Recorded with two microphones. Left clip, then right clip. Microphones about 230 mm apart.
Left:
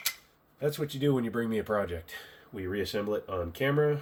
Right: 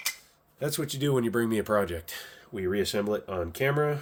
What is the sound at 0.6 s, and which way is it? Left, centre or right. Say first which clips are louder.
Speech: even; right.